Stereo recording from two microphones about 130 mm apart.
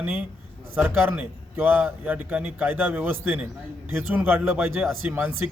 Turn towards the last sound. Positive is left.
turn(degrees=-20)  # may be behind; listen again after turning